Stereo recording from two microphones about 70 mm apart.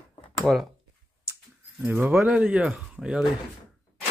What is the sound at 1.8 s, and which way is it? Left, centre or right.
Speech, right.